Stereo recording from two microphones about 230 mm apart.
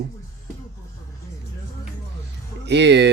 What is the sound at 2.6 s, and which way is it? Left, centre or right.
Speech, right.